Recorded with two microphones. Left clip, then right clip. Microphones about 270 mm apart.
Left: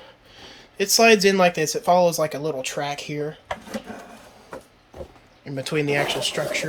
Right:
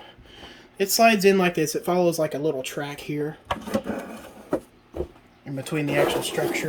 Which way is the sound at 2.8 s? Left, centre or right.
Centre.